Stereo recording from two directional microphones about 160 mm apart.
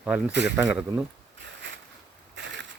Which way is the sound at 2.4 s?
90° right.